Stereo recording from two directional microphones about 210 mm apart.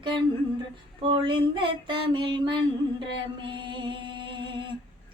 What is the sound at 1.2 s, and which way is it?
Female singing, 25° right (ahead or behind).